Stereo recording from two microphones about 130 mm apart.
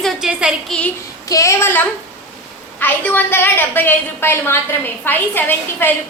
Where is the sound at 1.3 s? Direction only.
25° left (ahead or behind).